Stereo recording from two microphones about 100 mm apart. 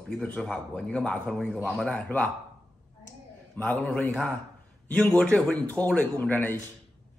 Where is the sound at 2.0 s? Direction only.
20° left (ahead or behind).